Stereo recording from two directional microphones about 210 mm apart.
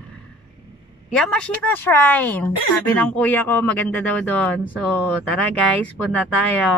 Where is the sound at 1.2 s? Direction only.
5° left (ahead or behind).